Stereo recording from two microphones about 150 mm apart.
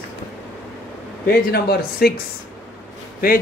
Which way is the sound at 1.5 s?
90° left.